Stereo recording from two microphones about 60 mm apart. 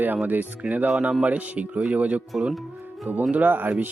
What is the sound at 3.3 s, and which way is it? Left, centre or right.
Speech, right.